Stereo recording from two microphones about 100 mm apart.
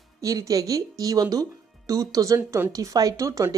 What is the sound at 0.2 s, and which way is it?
Speech, 35° right (ahead or behind).